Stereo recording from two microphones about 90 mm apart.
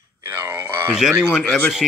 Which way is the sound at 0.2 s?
25° right (ahead or behind).